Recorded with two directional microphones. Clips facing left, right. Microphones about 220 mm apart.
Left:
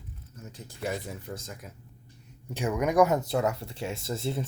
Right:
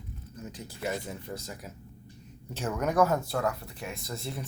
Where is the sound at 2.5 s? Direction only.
15° left (ahead or behind).